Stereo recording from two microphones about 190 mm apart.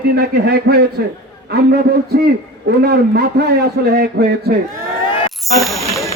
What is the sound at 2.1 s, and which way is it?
A man's voice, 55° right (ahead or behind).